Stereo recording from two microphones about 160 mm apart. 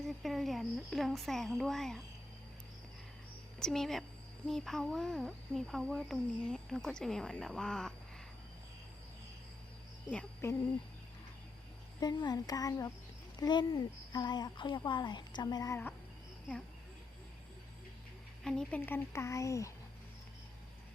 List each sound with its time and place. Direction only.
0.0 s speech: centre (ahead or behind)
3.6 s speech: centre (ahead or behind)
10.1 s speech: 10° left (ahead or behind)
11.9 s a woman's voice: 25° left (ahead or behind)
18.4 s speech: 5° left (ahead or behind)